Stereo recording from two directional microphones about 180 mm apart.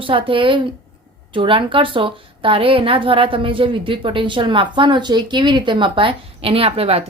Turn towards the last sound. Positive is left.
turn(degrees=-35)  # may be behind; listen again after turning